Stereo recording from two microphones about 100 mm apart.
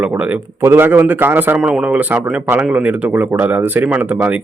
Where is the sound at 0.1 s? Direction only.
20° right (ahead or behind).